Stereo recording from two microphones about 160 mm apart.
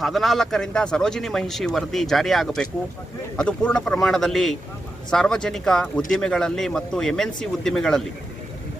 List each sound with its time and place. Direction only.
0.0 s speech: centre (ahead or behind)